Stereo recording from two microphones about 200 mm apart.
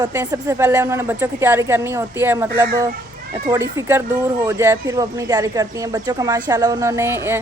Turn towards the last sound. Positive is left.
turn(degrees=-10)  # may be behind; listen again after turning